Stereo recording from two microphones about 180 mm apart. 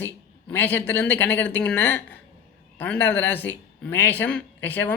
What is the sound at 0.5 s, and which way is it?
Speech, 10° left (ahead or behind).